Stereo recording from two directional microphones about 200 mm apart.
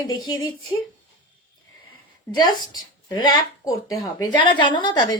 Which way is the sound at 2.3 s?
20° left (ahead or behind).